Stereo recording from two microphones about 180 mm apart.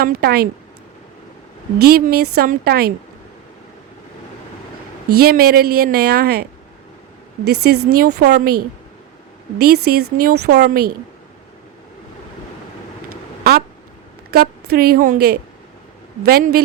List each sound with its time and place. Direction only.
0.0 s a woman's voice: 60° right (ahead or behind)
1.8 s a woman's voice: 55° right (ahead or behind)
5.2 s a woman's voice: 60° right (ahead or behind)
7.4 s a woman's voice: 65° right (ahead or behind)
9.6 s a woman's voice: 60° right (ahead or behind)
14.3 s a woman's voice: 55° right (ahead or behind)